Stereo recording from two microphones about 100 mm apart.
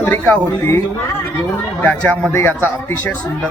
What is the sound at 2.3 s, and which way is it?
Speech, 25° left (ahead or behind).